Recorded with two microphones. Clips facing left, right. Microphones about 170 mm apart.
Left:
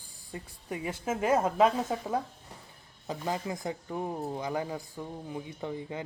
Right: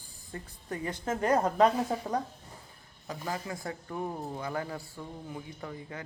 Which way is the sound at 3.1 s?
20° left (ahead or behind).